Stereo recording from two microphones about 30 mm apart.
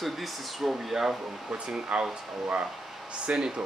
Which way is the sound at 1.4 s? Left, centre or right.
Right.